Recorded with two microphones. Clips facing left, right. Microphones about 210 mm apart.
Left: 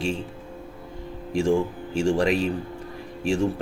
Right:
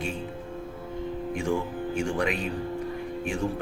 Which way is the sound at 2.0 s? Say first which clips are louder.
Left 7 dB; 30° left (ahead or behind).